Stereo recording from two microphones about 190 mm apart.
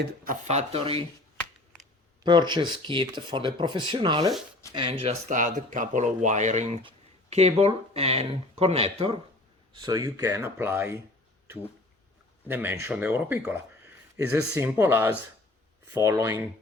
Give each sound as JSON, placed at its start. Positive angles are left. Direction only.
{"t": 0.4, "sound": "speech", "side_deg": -35}
{"t": 2.2, "sound": "speech", "side_deg": -25}
{"t": 5.3, "sound": "speech", "side_deg": -45}
{"t": 9.7, "sound": "speech", "side_deg": -20}
{"t": 12.5, "sound": "speech", "side_deg": -10}